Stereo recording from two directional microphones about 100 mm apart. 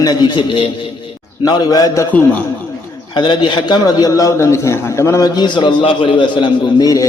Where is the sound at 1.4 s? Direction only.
40° left (ahead or behind).